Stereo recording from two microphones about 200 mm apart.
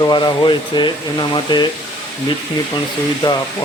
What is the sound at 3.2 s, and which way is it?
Speech, 20° left (ahead or behind).